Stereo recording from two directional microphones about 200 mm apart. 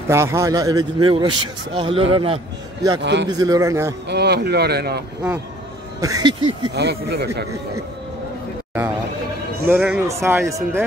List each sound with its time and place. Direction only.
0.1 s a man's voice: 15° right (ahead or behind)
3.0 s speech: 60° right (ahead or behind)
3.3 s a man's voice: 20° right (ahead or behind)
4.1 s speech: 55° right (ahead or behind)
5.9 s a man's voice: 15° right (ahead or behind)
6.7 s speech: 55° right (ahead or behind)
9.7 s a man's voice: 5° right (ahead or behind)